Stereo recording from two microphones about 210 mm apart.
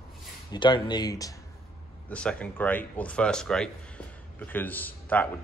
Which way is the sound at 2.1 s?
5° left (ahead or behind).